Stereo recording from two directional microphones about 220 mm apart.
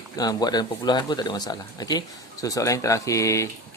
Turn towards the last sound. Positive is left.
turn(degrees=15)  # may be behind; listen again after turning